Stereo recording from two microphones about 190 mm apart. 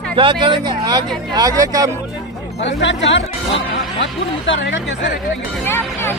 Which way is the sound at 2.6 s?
70° left (ahead or behind).